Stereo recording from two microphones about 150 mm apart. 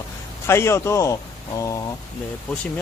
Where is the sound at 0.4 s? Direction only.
15° left (ahead or behind).